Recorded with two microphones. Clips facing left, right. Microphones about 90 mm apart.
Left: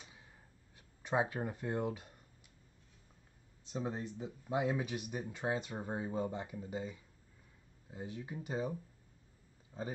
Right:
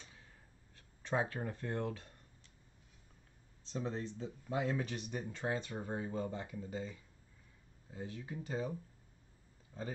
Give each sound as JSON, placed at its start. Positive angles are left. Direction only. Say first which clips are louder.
{"t": 0.0, "sound": "a sound", "louder": "left 1 dB", "side_deg": 15}
{"t": 0.7, "sound": "speech", "louder": "left 2 dB", "side_deg": 15}
{"t": 3.7, "sound": "speech", "louder": "left 1 dB", "side_deg": 15}